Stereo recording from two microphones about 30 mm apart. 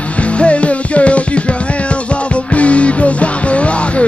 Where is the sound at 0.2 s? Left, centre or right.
Left.